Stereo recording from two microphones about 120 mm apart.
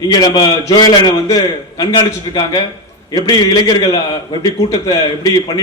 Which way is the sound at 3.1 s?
35° left (ahead or behind).